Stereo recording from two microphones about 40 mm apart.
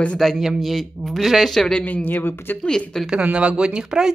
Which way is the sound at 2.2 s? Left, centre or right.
Left.